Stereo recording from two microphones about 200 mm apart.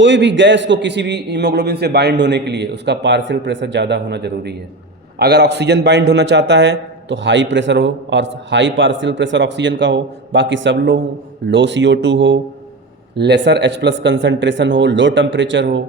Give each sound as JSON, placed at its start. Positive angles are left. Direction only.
{"t": 0.0, "sound": "a man's voice", "side_deg": -65}